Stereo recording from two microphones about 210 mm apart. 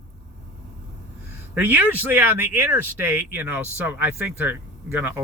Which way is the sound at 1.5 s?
10° right (ahead or behind).